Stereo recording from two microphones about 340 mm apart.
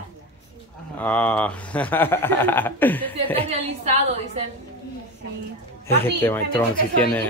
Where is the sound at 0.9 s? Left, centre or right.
Centre.